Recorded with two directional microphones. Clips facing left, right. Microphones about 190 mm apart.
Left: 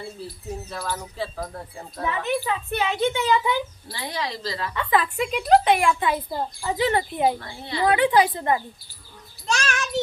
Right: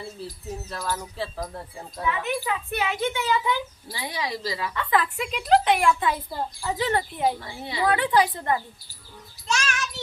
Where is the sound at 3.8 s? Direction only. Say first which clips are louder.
Left 1 dB; 10° right (ahead or behind).